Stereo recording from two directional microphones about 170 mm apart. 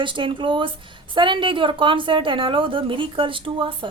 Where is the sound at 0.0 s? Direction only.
30° right (ahead or behind).